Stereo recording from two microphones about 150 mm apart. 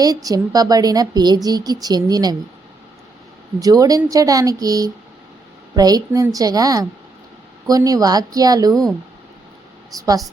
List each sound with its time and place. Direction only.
0.0 s a woman's voice: 25° right (ahead or behind)
3.6 s a woman's voice: 25° right (ahead or behind)
8.7 s speech: centre (ahead or behind)
9.9 s a woman's voice: 25° right (ahead or behind)